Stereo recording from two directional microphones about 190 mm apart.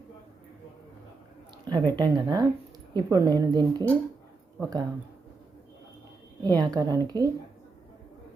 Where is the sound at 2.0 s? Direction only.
20° right (ahead or behind).